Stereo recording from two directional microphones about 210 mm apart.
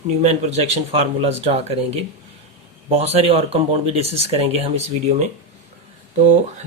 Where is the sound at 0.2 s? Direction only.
30° right (ahead or behind).